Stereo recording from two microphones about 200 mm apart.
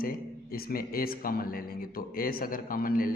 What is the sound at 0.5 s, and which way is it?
Speech, 45° left (ahead or behind).